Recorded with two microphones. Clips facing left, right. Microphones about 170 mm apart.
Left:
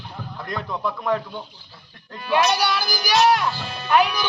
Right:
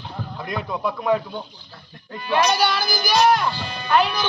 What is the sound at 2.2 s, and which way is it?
Speech, centre (ahead or behind).